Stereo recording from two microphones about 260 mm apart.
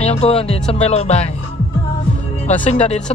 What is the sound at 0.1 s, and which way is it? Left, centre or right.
Speech, left.